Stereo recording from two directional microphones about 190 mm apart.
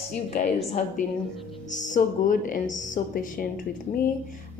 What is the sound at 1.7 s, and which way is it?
Speech, 40° left (ahead or behind).